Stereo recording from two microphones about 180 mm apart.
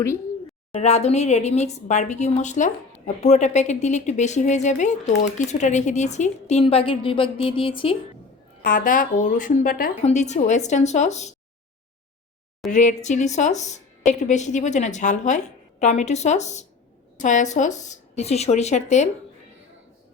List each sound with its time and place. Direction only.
0.8 s speech: 35° left (ahead or behind)
8.6 s speech: 50° left (ahead or behind)
10.0 s speech: 40° left (ahead or behind)
12.7 s speech: 45° left (ahead or behind)